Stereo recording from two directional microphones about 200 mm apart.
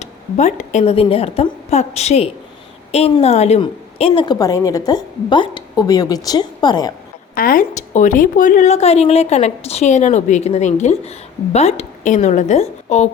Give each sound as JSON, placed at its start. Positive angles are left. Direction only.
{"t": 0.0, "sound": "a woman's voice", "side_deg": 35}
{"t": 7.3, "sound": "a woman's voice", "side_deg": 45}